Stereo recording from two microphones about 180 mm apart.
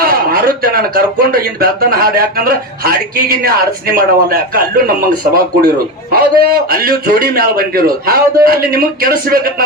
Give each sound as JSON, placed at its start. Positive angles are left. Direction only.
{"t": 0.0, "sound": "speech", "side_deg": -55}